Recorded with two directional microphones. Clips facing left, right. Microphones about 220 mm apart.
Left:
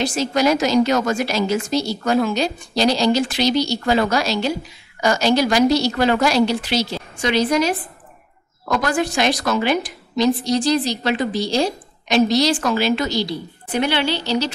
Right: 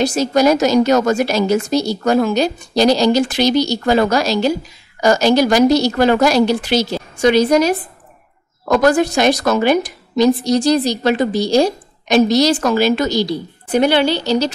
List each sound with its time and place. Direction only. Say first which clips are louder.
0.0 s a woman's voice: right 5 dB; 40° right (ahead or behind)